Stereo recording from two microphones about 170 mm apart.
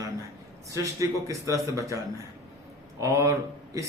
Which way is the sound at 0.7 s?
20° right (ahead or behind).